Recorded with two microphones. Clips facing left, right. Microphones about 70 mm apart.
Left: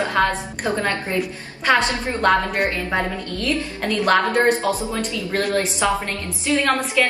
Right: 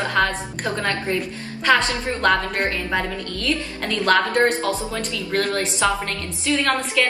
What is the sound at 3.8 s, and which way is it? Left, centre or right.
A woman's voice, centre.